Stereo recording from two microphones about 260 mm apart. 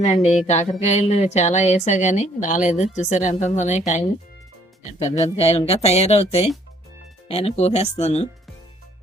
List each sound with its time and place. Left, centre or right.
0.0 s a woman's voice: left
5.0 s a woman's voice: left